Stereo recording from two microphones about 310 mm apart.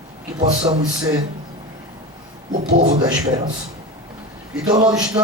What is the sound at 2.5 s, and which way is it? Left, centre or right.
Speech, right.